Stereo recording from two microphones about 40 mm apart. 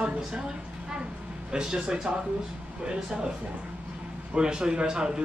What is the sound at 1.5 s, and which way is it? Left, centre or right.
Speech, right.